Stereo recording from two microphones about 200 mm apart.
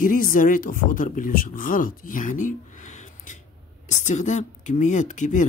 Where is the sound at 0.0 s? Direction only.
40° left (ahead or behind).